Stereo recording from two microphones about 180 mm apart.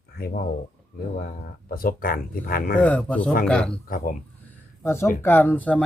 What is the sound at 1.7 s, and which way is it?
Speech, 55° left (ahead or behind).